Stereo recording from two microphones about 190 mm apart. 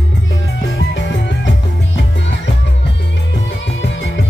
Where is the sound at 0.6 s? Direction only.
70° left (ahead or behind).